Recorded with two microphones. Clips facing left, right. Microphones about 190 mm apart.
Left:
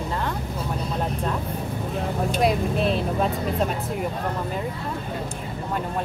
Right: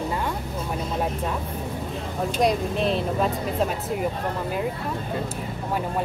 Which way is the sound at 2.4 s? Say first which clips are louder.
Even; 5° left (ahead or behind).